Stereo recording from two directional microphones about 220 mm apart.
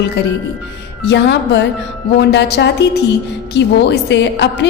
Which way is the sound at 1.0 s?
50° left (ahead or behind).